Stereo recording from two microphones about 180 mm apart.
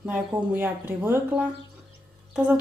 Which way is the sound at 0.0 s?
10° right (ahead or behind).